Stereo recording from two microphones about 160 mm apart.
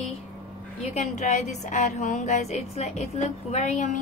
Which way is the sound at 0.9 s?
45° left (ahead or behind).